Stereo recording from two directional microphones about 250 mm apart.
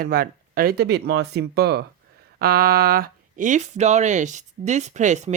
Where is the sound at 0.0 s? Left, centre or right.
Right.